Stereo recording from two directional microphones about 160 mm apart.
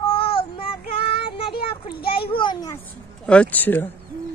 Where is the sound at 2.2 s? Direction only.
30° left (ahead or behind).